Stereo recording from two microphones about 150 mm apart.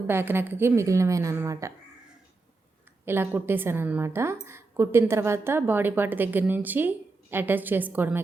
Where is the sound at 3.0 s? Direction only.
15° right (ahead or behind).